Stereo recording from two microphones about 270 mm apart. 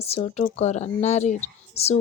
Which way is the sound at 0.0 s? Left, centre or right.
Left.